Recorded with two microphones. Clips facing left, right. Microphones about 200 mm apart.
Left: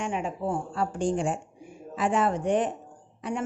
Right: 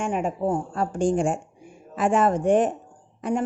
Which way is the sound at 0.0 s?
45° right (ahead or behind).